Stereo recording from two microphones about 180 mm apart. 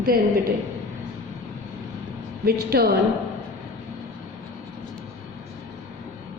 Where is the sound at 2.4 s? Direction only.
60° right (ahead or behind).